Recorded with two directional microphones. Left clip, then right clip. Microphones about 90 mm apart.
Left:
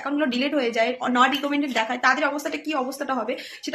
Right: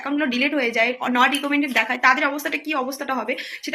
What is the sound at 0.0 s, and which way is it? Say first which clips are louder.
A woman's voice: right 2 dB; 25° left (ahead or behind).